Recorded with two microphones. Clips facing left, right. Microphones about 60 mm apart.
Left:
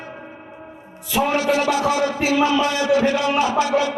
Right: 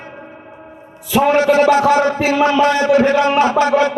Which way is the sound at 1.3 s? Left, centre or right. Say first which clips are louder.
Right 9 dB; right.